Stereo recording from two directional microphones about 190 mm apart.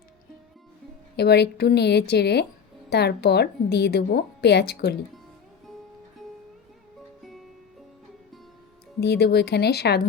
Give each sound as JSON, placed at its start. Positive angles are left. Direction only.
{"t": 1.1, "sound": "a woman's voice", "side_deg": 60}
{"t": 7.2, "sound": "music", "side_deg": 0}
{"t": 9.0, "sound": "a woman's voice", "side_deg": 60}